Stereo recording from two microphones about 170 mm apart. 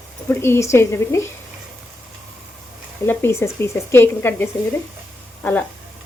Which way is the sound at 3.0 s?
15° left (ahead or behind).